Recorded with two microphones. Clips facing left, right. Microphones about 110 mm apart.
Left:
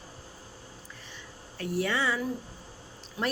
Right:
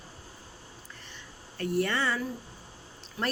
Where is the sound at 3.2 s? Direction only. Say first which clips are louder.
Left 1 dB; 20° left (ahead or behind).